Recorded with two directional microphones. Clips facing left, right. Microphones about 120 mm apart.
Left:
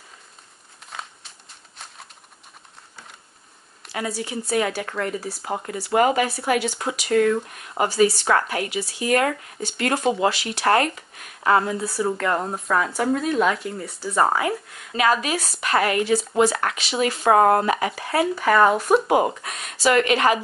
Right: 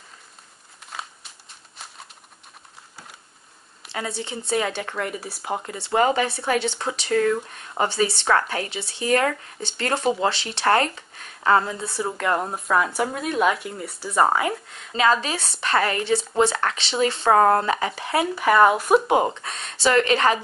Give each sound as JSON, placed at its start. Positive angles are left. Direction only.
{"t": 0.8, "sound": "a sound", "side_deg": 0}
{"t": 1.8, "sound": "bird", "side_deg": 0}
{"t": 3.9, "sound": "a woman's voice", "side_deg": -25}
{"t": 4.9, "sound": "speech", "side_deg": -5}
{"t": 5.7, "sound": "a woman's voice", "side_deg": -25}
{"t": 7.1, "sound": "speech", "side_deg": 40}
{"t": 7.8, "sound": "a woman's voice", "side_deg": -30}
{"t": 12.2, "sound": "speech", "side_deg": -10}
{"t": 14.3, "sound": "a woman's voice", "side_deg": -25}
{"t": 17.3, "sound": "speech", "side_deg": 20}
{"t": 17.6, "sound": "a woman's voice", "side_deg": -30}
{"t": 18.3, "sound": "speech", "side_deg": -5}
{"t": 19.4, "sound": "a woman's voice", "side_deg": -30}